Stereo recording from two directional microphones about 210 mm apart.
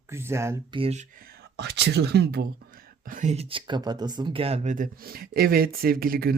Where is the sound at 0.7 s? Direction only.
30° right (ahead or behind).